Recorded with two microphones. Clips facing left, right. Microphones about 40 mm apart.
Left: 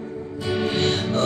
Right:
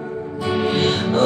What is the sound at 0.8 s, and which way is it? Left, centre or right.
Music, right.